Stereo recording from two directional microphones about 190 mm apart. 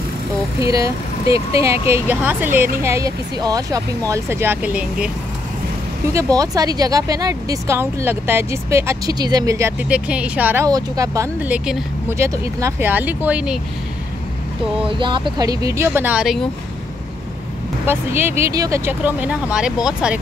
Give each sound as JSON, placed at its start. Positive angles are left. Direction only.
{"t": 0.7, "sound": "speech", "side_deg": -15}
{"t": 6.1, "sound": "speech", "side_deg": -20}
{"t": 14.8, "sound": "speech", "side_deg": -25}
{"t": 17.8, "sound": "speech", "side_deg": -10}